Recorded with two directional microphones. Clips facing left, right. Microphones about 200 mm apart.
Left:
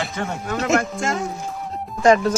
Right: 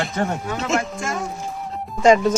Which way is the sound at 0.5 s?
60° left (ahead or behind).